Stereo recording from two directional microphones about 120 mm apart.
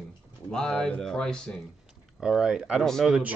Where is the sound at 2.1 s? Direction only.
5° right (ahead or behind).